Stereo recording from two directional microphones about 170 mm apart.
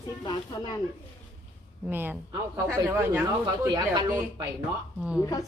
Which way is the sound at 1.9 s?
10° right (ahead or behind).